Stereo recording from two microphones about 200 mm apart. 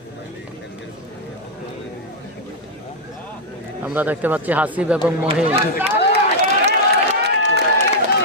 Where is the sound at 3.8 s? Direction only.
10° right (ahead or behind).